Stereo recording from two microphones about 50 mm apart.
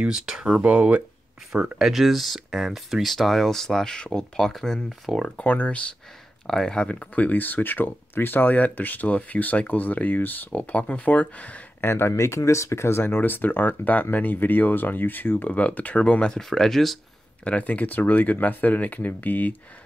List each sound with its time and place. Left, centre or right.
0.0 s speech: centre
0.6 s speech: right
1.5 s speech: centre
5.4 s speech: left
6.4 s speech: centre
7.2 s speech: left
11.8 s speech: left
12.1 s speech: left
13.0 s speech: left
15.5 s speech: left
16.3 s speech: centre
17.5 s speech: left